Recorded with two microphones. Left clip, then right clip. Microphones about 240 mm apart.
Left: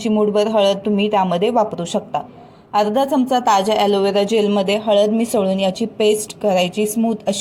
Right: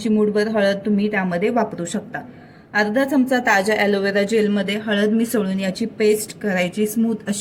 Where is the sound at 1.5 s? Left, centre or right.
Centre.